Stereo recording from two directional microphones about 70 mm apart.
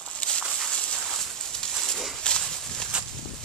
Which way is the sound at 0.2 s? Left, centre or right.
Centre.